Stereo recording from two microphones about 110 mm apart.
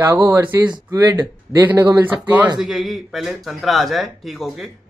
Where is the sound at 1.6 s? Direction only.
20° right (ahead or behind).